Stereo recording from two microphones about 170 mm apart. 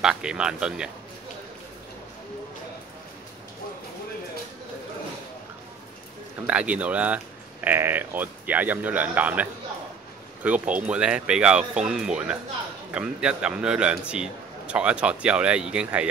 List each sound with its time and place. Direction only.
0.0 s speech: 5° right (ahead or behind)
6.4 s speech: 5° right (ahead or behind)